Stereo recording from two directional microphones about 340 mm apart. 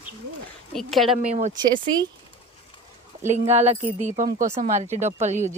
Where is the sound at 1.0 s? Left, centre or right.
Centre.